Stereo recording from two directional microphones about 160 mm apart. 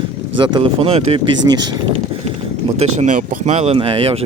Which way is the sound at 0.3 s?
30° right (ahead or behind).